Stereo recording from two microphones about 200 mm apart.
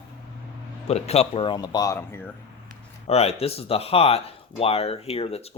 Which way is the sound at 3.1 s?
30° left (ahead or behind).